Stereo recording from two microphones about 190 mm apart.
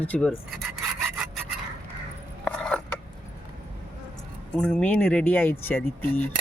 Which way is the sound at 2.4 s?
5° left (ahead or behind).